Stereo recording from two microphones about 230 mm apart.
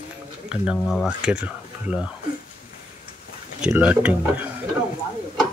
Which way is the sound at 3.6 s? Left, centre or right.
Centre.